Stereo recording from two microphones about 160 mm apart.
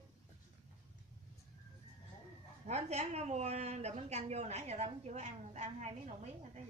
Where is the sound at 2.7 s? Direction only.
45° right (ahead or behind).